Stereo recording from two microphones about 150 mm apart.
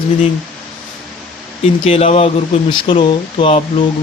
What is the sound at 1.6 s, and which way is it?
Speech, 40° left (ahead or behind).